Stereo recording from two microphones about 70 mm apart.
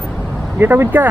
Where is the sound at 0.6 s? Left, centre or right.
Right.